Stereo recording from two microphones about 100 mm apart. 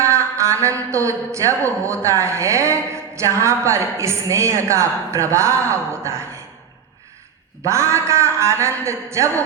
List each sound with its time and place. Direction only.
0.0 s speech: 30° right (ahead or behind)
7.6 s a man's voice: 30° right (ahead or behind)